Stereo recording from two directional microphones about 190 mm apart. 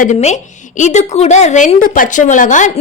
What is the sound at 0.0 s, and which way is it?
A woman's voice, 40° left (ahead or behind).